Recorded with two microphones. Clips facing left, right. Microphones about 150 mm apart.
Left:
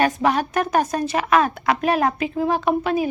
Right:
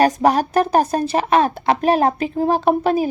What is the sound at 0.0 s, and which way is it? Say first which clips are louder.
Speech: right 4 dB; 40° right (ahead or behind).